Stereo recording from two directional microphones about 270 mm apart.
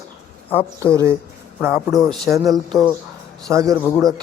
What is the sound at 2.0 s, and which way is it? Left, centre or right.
Speech, centre.